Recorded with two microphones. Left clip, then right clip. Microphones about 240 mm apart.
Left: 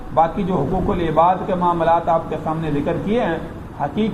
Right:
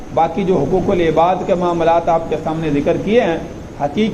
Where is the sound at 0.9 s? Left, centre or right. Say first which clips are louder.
Right 1 dB; left.